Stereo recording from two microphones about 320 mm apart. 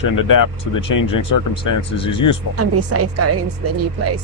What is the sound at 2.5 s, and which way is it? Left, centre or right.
Speech, right.